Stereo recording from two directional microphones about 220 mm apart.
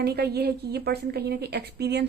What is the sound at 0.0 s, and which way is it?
A woman's voice, 45° right (ahead or behind).